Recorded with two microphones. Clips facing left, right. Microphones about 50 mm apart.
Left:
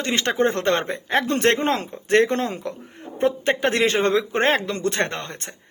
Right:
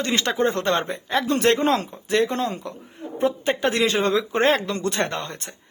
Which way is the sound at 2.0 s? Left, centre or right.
Left.